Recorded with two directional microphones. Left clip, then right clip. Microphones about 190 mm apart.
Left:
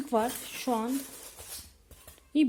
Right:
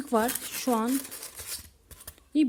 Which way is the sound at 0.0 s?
30° right (ahead or behind).